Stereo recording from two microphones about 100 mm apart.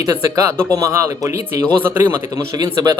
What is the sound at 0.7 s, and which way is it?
Speech, 35° right (ahead or behind).